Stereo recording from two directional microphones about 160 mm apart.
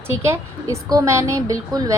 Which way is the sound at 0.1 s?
15° right (ahead or behind).